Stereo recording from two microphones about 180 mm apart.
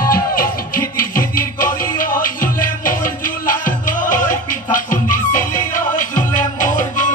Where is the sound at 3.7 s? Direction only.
45° left (ahead or behind).